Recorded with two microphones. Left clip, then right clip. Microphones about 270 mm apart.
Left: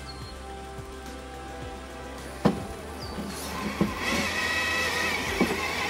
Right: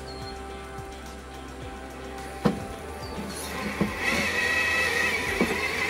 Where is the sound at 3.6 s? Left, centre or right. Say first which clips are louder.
Right 2 dB; centre.